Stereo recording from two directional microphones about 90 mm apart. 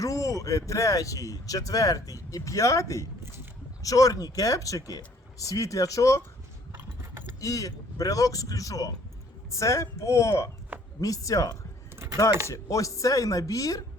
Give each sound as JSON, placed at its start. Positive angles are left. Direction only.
{"t": 0.0, "sound": "speech", "side_deg": 40}
{"t": 6.7, "sound": "a sound", "side_deg": -30}
{"t": 7.3, "sound": "speech", "side_deg": 40}